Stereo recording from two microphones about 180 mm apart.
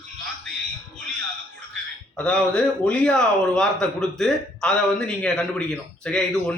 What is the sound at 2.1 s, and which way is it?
A man's voice, 5° left (ahead or behind).